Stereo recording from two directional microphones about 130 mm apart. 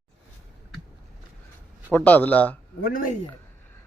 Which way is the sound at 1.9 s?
10° left (ahead or behind).